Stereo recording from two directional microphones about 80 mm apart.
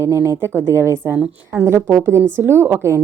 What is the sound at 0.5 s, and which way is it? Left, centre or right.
A woman's voice, right.